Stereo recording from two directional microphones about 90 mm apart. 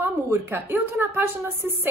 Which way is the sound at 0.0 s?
25° right (ahead or behind).